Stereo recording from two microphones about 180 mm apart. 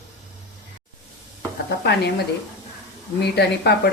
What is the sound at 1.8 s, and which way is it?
Speech, 65° left (ahead or behind).